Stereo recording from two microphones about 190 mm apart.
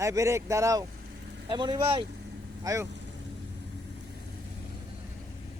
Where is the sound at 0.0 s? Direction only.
15° right (ahead or behind).